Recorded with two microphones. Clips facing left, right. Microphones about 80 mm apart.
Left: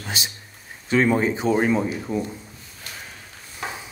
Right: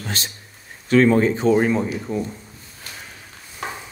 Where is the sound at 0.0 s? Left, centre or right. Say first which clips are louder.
Right 1 dB; centre.